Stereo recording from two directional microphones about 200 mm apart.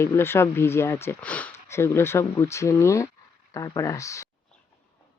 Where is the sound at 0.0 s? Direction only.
10° left (ahead or behind).